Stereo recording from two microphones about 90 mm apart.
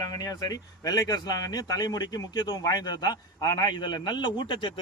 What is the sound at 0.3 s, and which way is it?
A man's voice, 45° left (ahead or behind).